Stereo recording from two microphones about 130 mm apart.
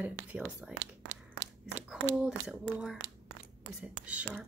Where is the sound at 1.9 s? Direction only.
10° right (ahead or behind).